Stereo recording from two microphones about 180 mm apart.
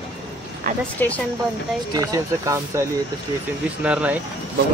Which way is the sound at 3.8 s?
5° right (ahead or behind).